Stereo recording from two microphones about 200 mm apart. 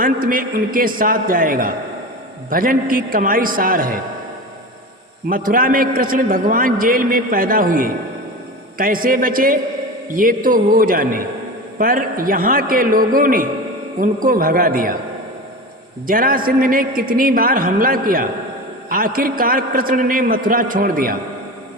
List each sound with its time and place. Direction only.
0.0 s a man's voice: 45° right (ahead or behind)
5.3 s a man's voice: 45° right (ahead or behind)
16.0 s a man's voice: 45° right (ahead or behind)